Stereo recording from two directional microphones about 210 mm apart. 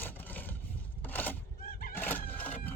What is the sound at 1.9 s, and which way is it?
Vehicle, 10° left (ahead or behind).